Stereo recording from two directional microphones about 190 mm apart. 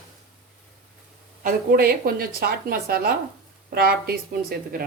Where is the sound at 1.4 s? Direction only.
50° right (ahead or behind).